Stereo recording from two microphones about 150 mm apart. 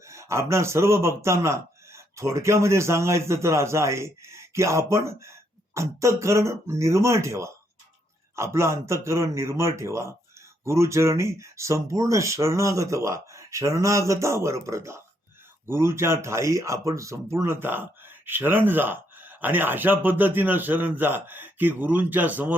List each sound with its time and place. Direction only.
0.0 s a man's voice: 20° right (ahead or behind)